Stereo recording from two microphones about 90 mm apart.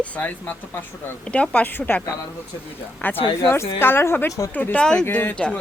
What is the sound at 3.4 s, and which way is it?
Speech, 30° left (ahead or behind).